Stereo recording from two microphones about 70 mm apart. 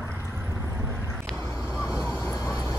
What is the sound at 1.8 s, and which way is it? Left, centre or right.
Vehicle, left.